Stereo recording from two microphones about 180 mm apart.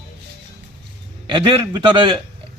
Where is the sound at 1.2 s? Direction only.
30° right (ahead or behind).